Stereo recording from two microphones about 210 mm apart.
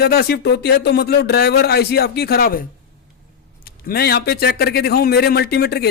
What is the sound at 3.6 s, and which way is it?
Speech, 45° left (ahead or behind).